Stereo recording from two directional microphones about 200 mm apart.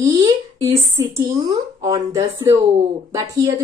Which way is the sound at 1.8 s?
20° right (ahead or behind).